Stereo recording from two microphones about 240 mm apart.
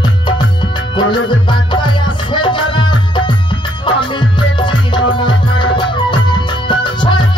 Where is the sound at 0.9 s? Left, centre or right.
Centre.